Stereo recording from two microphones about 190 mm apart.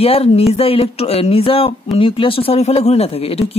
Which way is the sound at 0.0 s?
30° left (ahead or behind).